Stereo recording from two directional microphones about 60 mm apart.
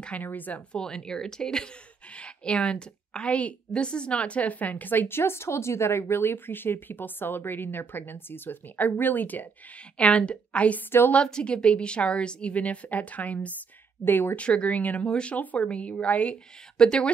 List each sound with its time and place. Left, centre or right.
0.2 s a woman's voice: left
0.7 s a woman's voice: centre; by 9.5 s left
9.9 s a woman's voice: centre
10.9 s a woman's voice: left
11.1 s a woman's voice: centre
14.0 s a woman's voice: left
14.3 s a woman's voice: centre